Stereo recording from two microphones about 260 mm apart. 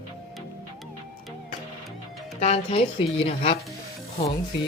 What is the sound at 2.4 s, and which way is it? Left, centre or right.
Speech, left.